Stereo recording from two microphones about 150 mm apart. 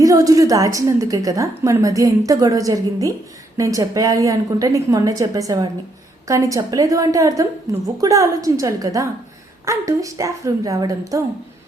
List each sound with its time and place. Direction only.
0.0 s a woman's voice: 25° right (ahead or behind)